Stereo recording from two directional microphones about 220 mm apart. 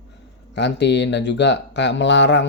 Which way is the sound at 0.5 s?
50° left (ahead or behind).